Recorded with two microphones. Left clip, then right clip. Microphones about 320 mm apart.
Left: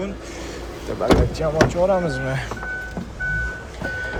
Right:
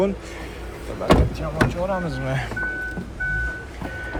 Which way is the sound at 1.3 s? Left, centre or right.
Left.